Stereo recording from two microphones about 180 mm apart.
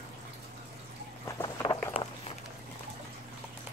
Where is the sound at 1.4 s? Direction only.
25° left (ahead or behind).